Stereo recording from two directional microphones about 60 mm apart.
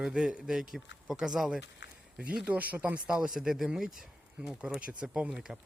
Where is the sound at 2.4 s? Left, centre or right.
Right.